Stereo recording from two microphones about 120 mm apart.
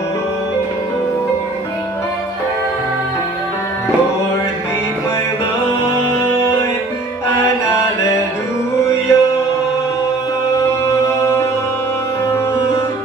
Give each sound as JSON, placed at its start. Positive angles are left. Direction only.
{"t": 6.2, "sound": "music", "side_deg": 20}
{"t": 8.8, "sound": "music", "side_deg": 25}